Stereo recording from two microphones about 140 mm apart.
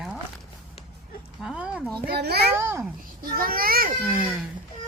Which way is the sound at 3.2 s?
90° right.